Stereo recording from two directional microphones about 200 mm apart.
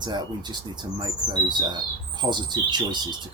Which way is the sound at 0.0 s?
20° right (ahead or behind).